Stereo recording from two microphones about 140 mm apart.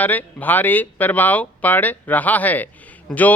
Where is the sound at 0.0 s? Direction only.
15° left (ahead or behind).